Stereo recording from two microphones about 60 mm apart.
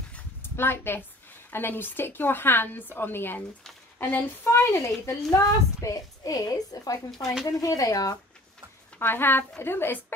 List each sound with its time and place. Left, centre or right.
0.4 s a woman's voice: left
5.0 s a woman's voice: left
9.0 s a woman's voice: left